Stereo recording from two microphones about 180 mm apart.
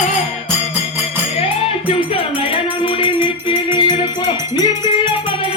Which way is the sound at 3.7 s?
25° left (ahead or behind).